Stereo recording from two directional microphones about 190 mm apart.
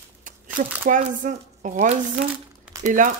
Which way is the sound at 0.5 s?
45° right (ahead or behind).